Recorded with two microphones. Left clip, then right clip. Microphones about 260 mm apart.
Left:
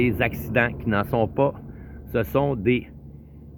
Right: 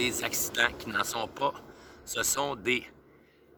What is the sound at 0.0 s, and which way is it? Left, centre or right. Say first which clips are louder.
Speech: left 7 dB; right.